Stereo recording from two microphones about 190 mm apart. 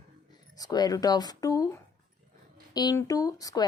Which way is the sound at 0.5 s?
20° left (ahead or behind).